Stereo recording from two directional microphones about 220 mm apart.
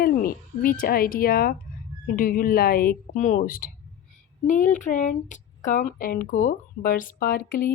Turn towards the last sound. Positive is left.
turn(degrees=40)  # may be behind; listen again after turning